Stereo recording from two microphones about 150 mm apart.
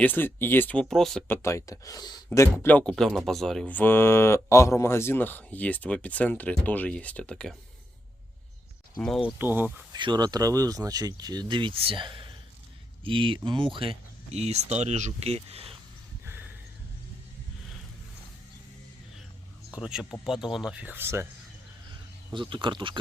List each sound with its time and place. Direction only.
0.0 s speech: 15° left (ahead or behind)
1.3 s speech: 20° left (ahead or behind)
9.0 s speech: 5° left (ahead or behind)
9.2 s speech: 15° right (ahead or behind)
9.9 s speech: 30° right (ahead or behind)
16.2 s a sound: 15° right (ahead or behind)
19.7 s speech: 5° right (ahead or behind)
22.3 s speech: 30° right (ahead or behind)